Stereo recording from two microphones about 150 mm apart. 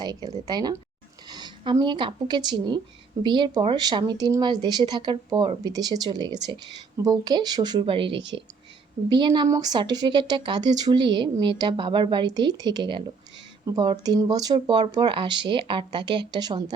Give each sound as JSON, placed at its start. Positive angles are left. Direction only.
{"t": 0.0, "sound": "a woman's voice", "side_deg": -25}